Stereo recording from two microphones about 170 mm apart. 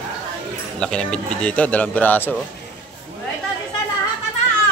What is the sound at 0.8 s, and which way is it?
Speech, 5° left (ahead or behind).